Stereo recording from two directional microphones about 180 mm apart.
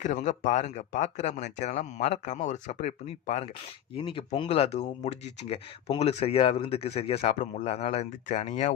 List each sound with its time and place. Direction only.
0.0 s speech: 40° left (ahead or behind)